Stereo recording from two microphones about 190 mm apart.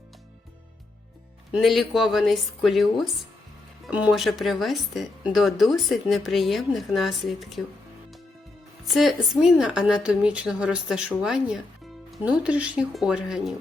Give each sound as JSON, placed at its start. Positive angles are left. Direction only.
{"t": 1.5, "sound": "a woman's voice", "side_deg": 0}
{"t": 8.9, "sound": "a woman's voice", "side_deg": 0}